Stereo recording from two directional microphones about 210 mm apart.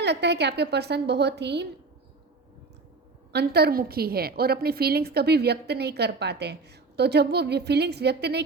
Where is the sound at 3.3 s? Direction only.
50° right (ahead or behind).